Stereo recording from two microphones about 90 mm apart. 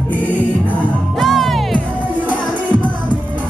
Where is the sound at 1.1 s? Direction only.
Centre (ahead or behind).